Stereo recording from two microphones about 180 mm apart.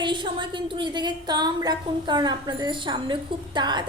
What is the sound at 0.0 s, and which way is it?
A woman's voice, 25° right (ahead or behind).